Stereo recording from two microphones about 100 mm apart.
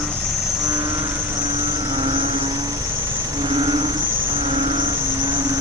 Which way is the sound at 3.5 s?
60° right (ahead or behind).